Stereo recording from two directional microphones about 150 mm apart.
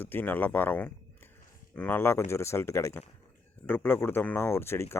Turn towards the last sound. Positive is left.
turn(degrees=15)  # may be behind; listen again after turning